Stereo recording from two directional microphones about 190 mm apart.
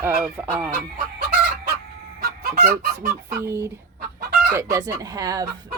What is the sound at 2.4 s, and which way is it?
Fowl, 50° right (ahead or behind).